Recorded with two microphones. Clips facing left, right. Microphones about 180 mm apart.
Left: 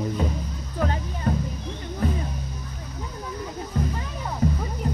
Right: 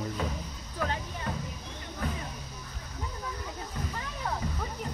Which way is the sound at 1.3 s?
40° left (ahead or behind).